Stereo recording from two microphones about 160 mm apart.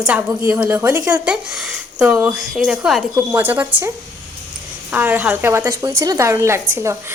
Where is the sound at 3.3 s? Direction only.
15° right (ahead or behind).